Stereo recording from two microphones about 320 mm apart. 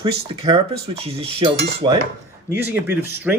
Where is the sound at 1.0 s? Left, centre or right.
Centre.